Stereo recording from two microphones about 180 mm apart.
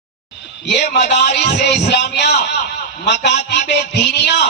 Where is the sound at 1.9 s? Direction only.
70° left (ahead or behind).